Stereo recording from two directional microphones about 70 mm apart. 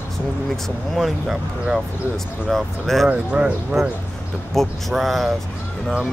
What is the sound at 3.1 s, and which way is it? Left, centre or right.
Speech, centre.